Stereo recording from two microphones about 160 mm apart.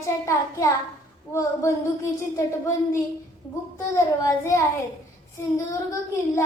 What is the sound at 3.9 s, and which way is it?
Speech, 20° left (ahead or behind).